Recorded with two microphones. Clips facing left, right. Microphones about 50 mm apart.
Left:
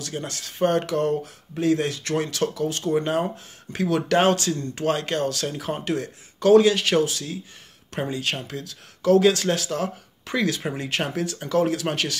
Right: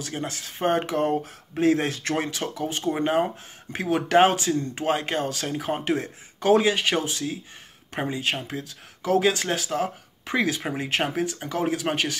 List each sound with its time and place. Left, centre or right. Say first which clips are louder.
0.0 s speech: even; centre
2.3 s speech: left 4 dB; centre